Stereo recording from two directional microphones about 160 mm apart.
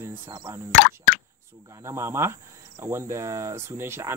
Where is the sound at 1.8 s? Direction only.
15° right (ahead or behind).